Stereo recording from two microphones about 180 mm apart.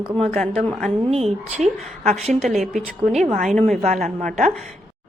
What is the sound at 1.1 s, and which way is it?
A woman's voice, 35° right (ahead or behind).